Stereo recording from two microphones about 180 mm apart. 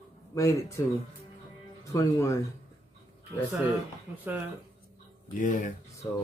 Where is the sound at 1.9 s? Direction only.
15° left (ahead or behind).